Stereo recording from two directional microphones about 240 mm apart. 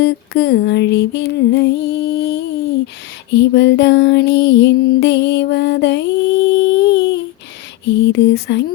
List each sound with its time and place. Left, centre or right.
0.0 s lullaby: left
3.3 s music: left
7.9 s lullaby: left